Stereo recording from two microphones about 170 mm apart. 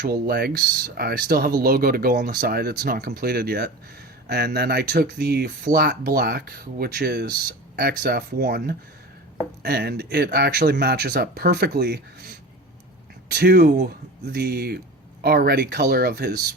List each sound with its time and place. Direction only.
0.0 s speech: 65° right (ahead or behind)
13.3 s speech: 70° right (ahead or behind)